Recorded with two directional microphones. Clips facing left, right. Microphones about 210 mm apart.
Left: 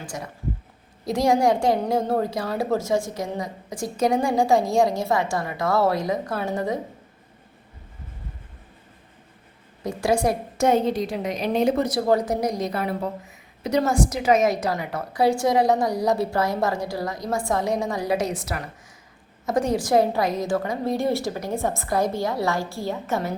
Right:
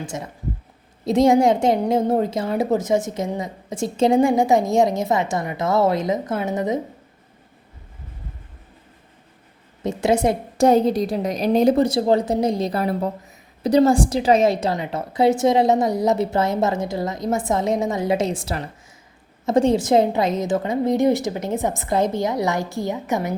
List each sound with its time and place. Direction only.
0.0 s a woman's voice: 25° right (ahead or behind)
9.8 s a woman's voice: 25° right (ahead or behind)
10.7 s a woman's voice: 35° right (ahead or behind); by 23.3 s 15° right (ahead or behind)